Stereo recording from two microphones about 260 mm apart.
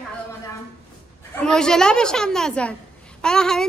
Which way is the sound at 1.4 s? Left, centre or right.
Centre.